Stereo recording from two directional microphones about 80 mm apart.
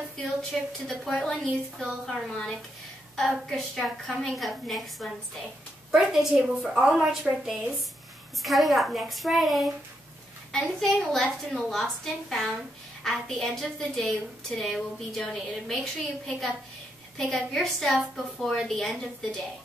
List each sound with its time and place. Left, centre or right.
0.2 s a woman's voice: centre